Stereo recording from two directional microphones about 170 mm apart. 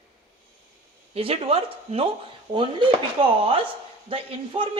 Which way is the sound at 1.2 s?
35° right (ahead or behind).